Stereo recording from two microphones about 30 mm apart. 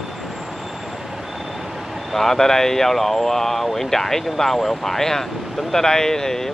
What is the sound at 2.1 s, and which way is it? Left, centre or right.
Speech, centre.